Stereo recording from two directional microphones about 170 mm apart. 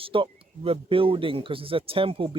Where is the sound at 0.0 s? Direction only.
30° right (ahead or behind).